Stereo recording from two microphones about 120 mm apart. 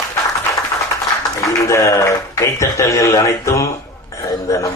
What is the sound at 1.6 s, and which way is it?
Speech, 25° left (ahead or behind).